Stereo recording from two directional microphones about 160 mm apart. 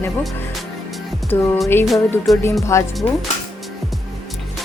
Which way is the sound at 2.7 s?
15° left (ahead or behind).